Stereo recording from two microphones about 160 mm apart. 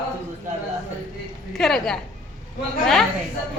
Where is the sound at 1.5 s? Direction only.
Centre (ahead or behind).